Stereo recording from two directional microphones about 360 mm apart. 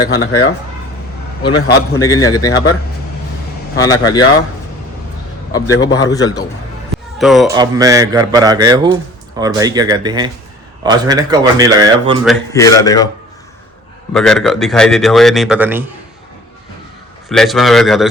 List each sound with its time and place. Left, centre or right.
0.1 s speech: left
1.9 s speech: centre
3.8 s speech: centre
5.5 s speech: centre
7.2 s speech: centre
12.2 s speech: centre
14.1 s speech: centre
17.2 s speech: centre